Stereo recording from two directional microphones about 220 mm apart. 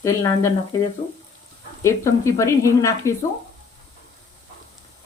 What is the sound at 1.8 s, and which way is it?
Speech, 15° left (ahead or behind).